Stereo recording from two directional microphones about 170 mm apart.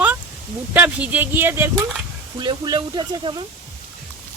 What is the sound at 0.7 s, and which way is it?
Speech, 10° right (ahead or behind).